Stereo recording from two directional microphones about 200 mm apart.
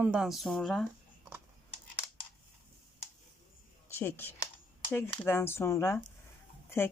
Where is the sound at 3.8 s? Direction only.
10° left (ahead or behind).